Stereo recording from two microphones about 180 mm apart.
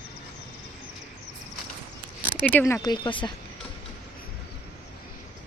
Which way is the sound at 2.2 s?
50° right (ahead or behind).